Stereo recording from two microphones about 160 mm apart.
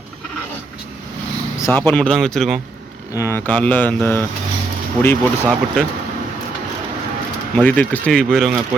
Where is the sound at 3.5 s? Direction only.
10° left (ahead or behind).